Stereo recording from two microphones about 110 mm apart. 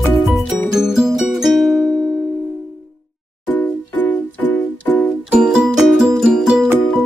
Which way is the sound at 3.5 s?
15° left (ahead or behind).